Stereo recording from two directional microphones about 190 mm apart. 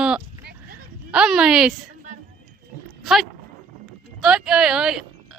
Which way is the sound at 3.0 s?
Centre (ahead or behind).